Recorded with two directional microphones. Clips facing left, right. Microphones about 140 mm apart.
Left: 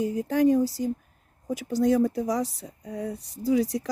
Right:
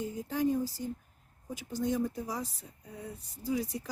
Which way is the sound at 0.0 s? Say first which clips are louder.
Left 9 dB; 75° left (ahead or behind).